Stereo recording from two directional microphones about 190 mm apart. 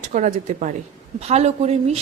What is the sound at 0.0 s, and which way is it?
A woman's voice, 40° right (ahead or behind).